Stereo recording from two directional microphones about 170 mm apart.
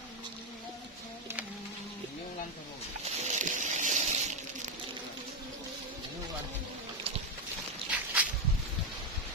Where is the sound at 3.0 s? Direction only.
40° right (ahead or behind).